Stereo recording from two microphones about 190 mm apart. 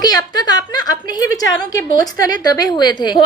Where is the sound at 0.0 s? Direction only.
20° left (ahead or behind).